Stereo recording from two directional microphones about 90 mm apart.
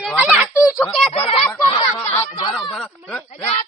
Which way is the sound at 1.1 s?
90° left.